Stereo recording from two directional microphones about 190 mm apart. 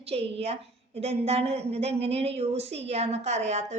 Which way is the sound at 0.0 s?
30° right (ahead or behind).